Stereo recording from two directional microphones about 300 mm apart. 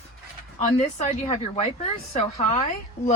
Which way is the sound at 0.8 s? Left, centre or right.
Left.